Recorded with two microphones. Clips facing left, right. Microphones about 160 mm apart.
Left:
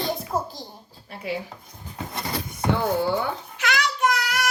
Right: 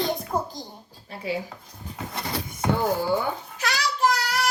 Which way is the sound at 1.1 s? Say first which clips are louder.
Even; 30° right (ahead or behind).